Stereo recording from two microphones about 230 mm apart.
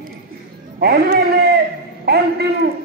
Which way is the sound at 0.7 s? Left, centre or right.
Right.